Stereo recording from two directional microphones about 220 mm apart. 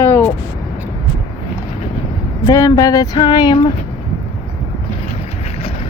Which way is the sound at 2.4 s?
15° left (ahead or behind).